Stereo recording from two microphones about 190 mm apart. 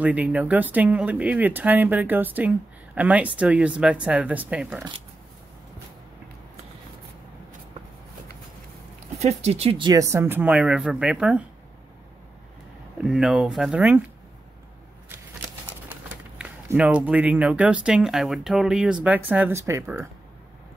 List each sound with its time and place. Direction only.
0.0 s speech: 5° right (ahead or behind)
9.2 s speech: 35° right (ahead or behind); by 11.4 s 5° right (ahead or behind)
13.0 s speech: 5° right (ahead or behind)
15.9 s speech: 5° right (ahead or behind)